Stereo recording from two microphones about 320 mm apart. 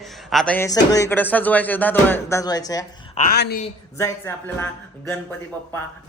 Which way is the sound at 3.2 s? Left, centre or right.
Left.